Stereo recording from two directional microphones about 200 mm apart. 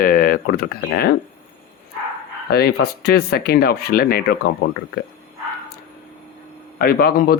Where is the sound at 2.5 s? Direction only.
50° left (ahead or behind).